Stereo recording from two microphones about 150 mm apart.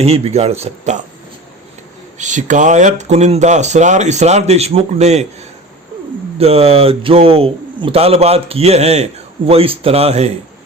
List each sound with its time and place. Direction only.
0.0 s speech: 45° right (ahead or behind)
2.1 s speech: 55° right (ahead or behind)